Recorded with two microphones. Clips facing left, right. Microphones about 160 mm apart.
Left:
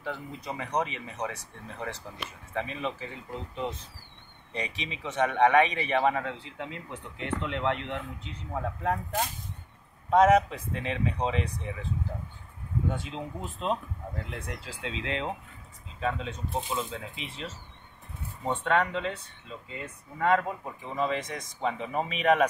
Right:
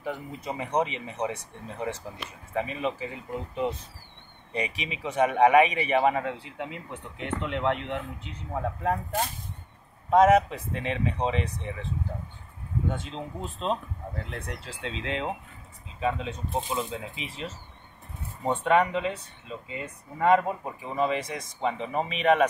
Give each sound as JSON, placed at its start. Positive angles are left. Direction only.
{"t": 0.0, "sound": "speech", "side_deg": -15}
{"t": 2.5, "sound": "speech", "side_deg": -10}
{"t": 4.5, "sound": "speech", "side_deg": -10}
{"t": 12.9, "sound": "speech", "side_deg": 5}
{"t": 20.8, "sound": "speech", "side_deg": -5}